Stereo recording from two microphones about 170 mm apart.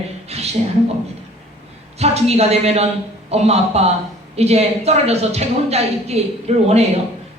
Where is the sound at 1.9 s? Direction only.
40° right (ahead or behind).